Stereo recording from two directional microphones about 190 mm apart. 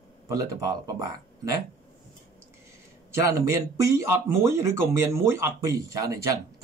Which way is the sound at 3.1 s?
15° right (ahead or behind).